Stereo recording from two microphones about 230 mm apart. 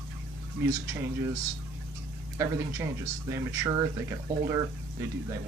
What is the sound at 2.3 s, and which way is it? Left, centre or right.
Speech, centre.